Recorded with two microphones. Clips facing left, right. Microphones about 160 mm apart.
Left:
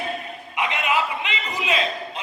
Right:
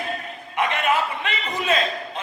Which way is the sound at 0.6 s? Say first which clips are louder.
Right 1 dB; 50° right (ahead or behind).